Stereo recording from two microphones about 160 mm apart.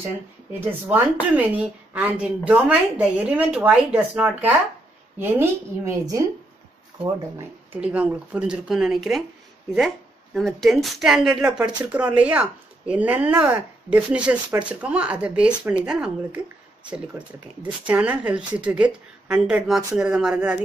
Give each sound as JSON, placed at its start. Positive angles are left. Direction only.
{"t": 0.0, "sound": "speech", "side_deg": -10}
{"t": 5.4, "sound": "a woman's voice", "side_deg": -20}
{"t": 7.3, "sound": "speech", "side_deg": -10}
{"t": 17.8, "sound": "speech", "side_deg": -10}